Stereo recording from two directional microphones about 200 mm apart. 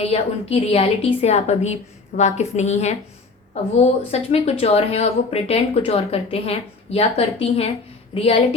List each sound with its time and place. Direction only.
0.0 s a woman's voice: 30° left (ahead or behind)